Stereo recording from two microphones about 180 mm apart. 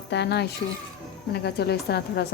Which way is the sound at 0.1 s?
70° left (ahead or behind).